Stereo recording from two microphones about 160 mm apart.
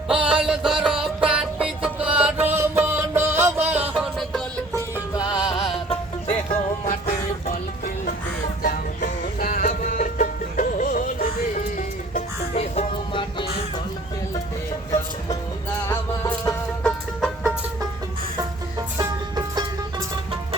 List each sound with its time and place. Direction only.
0.1 s music: 5° right (ahead or behind)
5.1 s music: 25° left (ahead or behind); by 6.9 s 50° left (ahead or behind)
8.6 s music: 55° left (ahead or behind)
12.1 s music: 45° left (ahead or behind)
15.9 s music: 15° left (ahead or behind)
17.2 s music: 5° right (ahead or behind)
18.9 s music: 20° right (ahead or behind)